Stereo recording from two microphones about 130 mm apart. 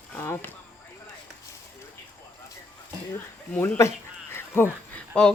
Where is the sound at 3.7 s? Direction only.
20° left (ahead or behind).